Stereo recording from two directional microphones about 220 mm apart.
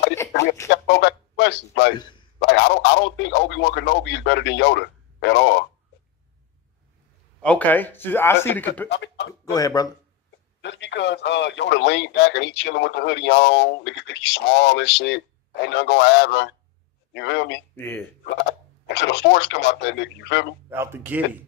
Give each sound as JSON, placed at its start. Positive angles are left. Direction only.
{"t": 0.7, "sound": "a man's voice", "side_deg": 50}
{"t": 7.4, "sound": "speech", "side_deg": 5}
{"t": 8.8, "sound": "speech", "side_deg": 50}
{"t": 9.4, "sound": "speech", "side_deg": 15}
{"t": 10.6, "sound": "a man's voice", "side_deg": 55}
{"t": 17.7, "sound": "speech", "side_deg": 10}
{"t": 18.9, "sound": "speech", "side_deg": 50}
{"t": 20.7, "sound": "speech", "side_deg": -10}